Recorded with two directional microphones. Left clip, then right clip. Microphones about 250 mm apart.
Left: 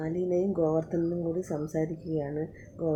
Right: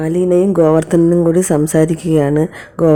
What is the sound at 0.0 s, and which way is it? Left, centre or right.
Speech, right.